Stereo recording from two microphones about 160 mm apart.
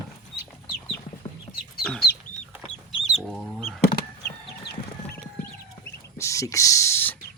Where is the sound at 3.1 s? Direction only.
Centre (ahead or behind).